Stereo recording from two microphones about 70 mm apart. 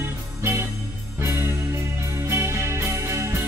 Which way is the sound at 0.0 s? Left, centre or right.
Right.